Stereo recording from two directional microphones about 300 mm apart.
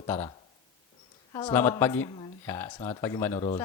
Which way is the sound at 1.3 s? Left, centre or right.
Centre.